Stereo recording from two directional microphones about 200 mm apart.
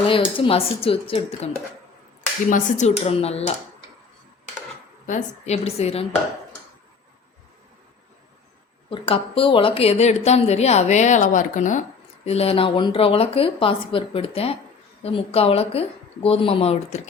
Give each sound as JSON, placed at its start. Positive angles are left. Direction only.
{"t": 0.3, "sound": "a woman's voice", "side_deg": 30}
{"t": 2.5, "sound": "a woman's voice", "side_deg": 40}
{"t": 5.0, "sound": "a woman's voice", "side_deg": 35}
{"t": 8.9, "sound": "a woman's voice", "side_deg": 25}